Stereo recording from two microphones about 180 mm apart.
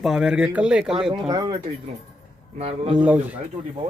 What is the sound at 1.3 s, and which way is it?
Speech, 20° right (ahead or behind).